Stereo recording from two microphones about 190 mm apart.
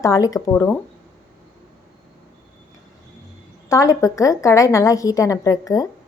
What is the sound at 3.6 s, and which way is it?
A woman's voice, 15° left (ahead or behind).